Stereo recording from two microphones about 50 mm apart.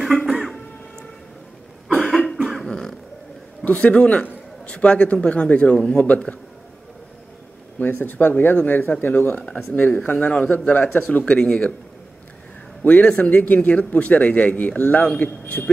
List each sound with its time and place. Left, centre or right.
0.3 s throat clearing: centre
2.0 s cough: centre
2.7 s a sound: centre
3.6 s a man's voice: left
7.8 s a man's voice: left; by 11.7 s centre
12.8 s a man's voice: left